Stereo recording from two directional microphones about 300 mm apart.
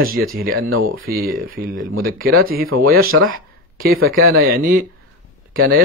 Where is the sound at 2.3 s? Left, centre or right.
Right.